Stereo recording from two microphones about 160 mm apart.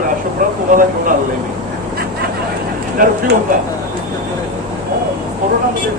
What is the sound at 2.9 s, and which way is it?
Speech, 65° right (ahead or behind).